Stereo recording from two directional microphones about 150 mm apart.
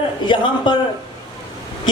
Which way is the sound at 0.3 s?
30° left (ahead or behind).